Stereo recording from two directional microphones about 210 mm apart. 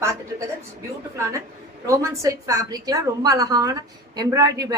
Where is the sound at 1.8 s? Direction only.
15° right (ahead or behind).